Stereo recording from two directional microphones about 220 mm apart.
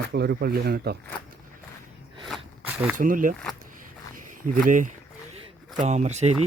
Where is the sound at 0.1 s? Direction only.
45° right (ahead or behind).